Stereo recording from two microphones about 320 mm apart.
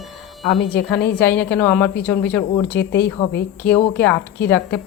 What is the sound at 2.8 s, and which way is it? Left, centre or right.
Speech, left.